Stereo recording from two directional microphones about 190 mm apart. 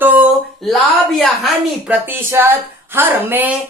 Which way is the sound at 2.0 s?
10° right (ahead or behind).